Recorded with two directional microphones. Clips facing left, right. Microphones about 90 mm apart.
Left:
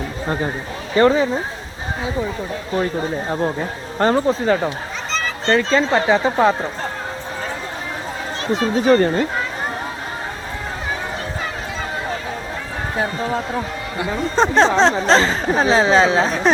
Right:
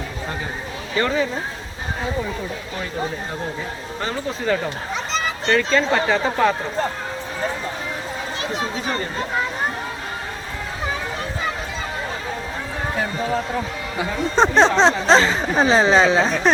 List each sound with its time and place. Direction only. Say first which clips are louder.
0.9 s speech: left 7 dB; 30° left (ahead or behind)
3.4 s speech: left 6 dB; 45° left (ahead or behind)
4.4 s speech: left 3 dB; 25° left (ahead or behind)
8.7 s speech: left 11 dB; 50° left (ahead or behind)
13.9 s speech: left 1 dB; centre (ahead or behind)